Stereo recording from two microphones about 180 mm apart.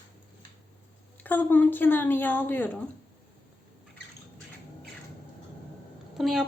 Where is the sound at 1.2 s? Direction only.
10° left (ahead or behind).